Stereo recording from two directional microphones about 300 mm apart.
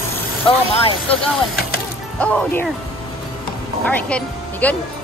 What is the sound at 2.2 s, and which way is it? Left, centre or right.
Speech, centre.